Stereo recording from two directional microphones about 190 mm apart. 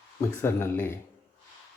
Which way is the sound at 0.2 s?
15° left (ahead or behind).